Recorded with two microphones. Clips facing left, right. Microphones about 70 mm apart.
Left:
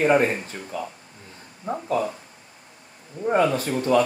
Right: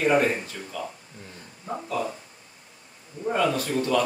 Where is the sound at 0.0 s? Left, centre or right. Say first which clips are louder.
Left 2 dB; left.